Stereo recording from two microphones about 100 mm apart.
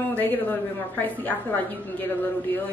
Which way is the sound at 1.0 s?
15° left (ahead or behind).